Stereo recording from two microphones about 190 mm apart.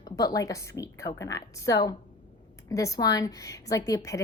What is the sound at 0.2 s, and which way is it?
A woman's voice, 20° left (ahead or behind).